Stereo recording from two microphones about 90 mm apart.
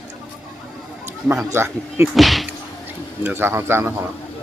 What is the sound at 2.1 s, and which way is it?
Speech, centre (ahead or behind).